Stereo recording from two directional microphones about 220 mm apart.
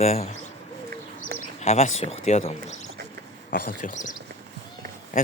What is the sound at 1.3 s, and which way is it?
Speech, 30° left (ahead or behind).